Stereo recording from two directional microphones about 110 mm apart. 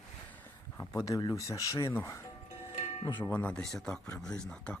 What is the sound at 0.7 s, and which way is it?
Speech, 30° left (ahead or behind).